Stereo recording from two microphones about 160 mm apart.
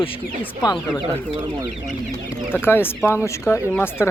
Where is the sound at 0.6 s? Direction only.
25° left (ahead or behind).